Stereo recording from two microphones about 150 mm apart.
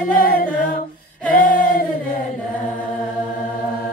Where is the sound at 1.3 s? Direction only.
65° left (ahead or behind).